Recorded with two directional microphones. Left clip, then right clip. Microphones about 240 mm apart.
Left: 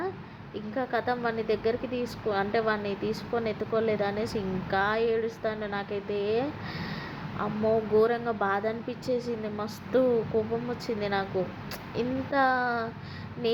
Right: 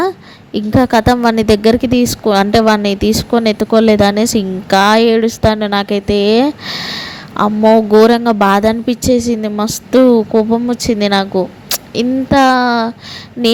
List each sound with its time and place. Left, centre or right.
0.5 s a woman's voice: right